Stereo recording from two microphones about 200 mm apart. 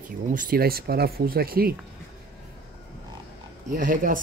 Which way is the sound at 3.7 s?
40° right (ahead or behind).